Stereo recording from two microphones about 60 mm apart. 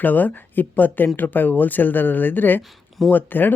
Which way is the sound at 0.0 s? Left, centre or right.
Left.